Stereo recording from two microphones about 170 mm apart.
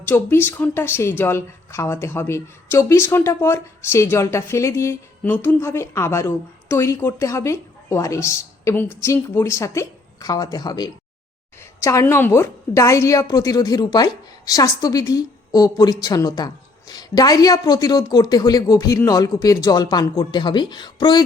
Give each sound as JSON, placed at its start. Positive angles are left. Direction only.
{"t": 0.0, "sound": "a woman's voice", "side_deg": 15}